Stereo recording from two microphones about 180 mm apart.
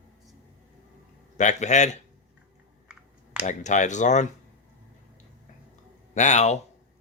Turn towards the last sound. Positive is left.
turn(degrees=40)  # may be behind; listen again after turning